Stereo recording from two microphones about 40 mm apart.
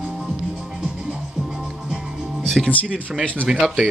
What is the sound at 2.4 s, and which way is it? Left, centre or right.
Music, centre.